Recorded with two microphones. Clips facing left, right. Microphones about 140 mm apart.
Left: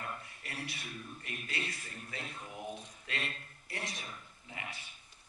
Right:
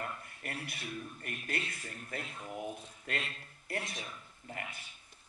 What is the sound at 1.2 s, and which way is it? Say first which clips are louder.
A man's voice: right 1 dB; 50° right (ahead or behind).